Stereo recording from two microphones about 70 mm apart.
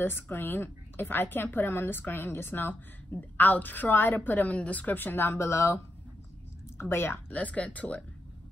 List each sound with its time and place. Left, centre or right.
0.0 s a woman's voice: left
6.8 s a woman's voice: left; by 8.0 s centre